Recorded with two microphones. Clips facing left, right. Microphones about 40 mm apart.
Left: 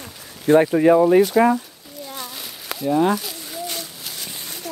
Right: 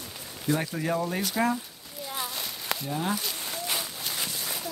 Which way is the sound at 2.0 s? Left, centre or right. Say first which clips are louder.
Even; centre.